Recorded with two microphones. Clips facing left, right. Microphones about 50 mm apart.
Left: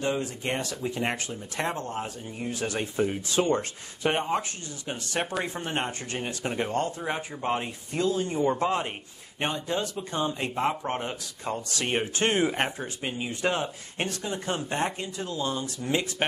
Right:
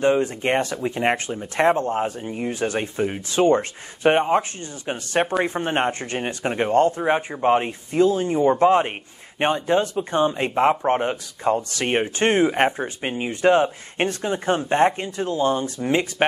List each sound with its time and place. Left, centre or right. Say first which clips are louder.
0.0 s speech: right 9 dB; right